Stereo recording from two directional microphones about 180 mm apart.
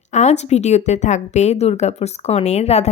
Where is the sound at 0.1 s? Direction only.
40° left (ahead or behind).